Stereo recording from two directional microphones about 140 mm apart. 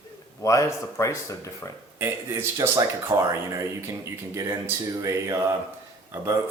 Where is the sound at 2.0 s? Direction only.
20° right (ahead or behind).